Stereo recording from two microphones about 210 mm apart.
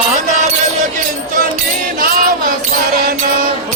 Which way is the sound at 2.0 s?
40° right (ahead or behind).